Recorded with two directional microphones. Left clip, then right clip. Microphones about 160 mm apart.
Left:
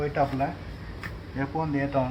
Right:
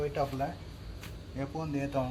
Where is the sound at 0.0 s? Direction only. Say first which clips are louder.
Left 6 dB; 10° right (ahead or behind).